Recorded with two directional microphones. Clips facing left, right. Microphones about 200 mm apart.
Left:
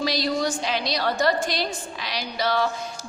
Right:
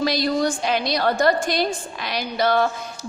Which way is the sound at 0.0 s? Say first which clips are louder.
Right 4 dB; 55° right (ahead or behind).